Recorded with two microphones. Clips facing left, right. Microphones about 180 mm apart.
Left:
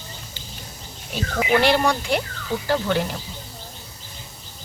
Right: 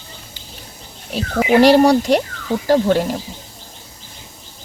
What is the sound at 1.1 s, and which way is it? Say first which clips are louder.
Speech: right 6 dB; 35° right (ahead or behind).